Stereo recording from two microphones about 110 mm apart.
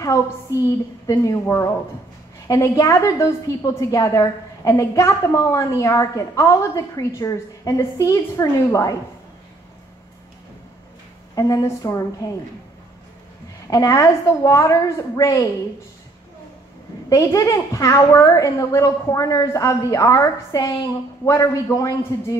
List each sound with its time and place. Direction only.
0.6 s a woman's voice: 30° left (ahead or behind)
11.3 s a woman's voice: 30° left (ahead or behind)
13.7 s a woman's voice: 30° left (ahead or behind)
17.1 s a woman's voice: 30° left (ahead or behind)